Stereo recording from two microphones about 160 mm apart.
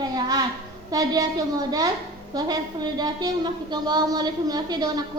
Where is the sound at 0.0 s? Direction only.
25° right (ahead or behind).